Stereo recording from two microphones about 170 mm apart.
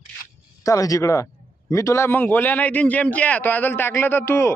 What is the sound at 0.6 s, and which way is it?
A man's voice, 20° left (ahead or behind).